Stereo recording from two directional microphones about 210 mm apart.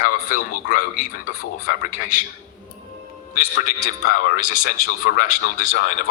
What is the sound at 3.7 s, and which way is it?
A man's voice, 45° left (ahead or behind).